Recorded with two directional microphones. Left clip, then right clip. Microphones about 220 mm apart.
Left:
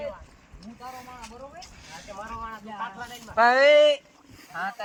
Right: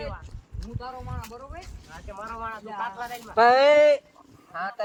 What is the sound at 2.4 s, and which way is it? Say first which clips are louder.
Speech: right 5 dB; 40° right (ahead or behind).